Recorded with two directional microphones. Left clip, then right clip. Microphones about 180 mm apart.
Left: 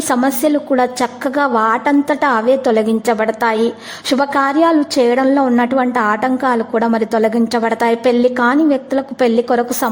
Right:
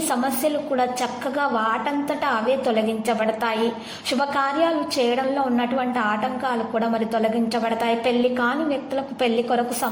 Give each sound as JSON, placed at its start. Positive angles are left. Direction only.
{"t": 0.1, "sound": "a woman's voice", "side_deg": 40}